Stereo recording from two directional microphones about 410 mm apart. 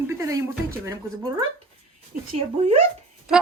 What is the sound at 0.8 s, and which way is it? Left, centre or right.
Speech, centre.